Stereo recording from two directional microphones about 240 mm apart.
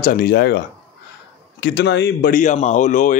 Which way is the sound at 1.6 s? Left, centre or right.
Left.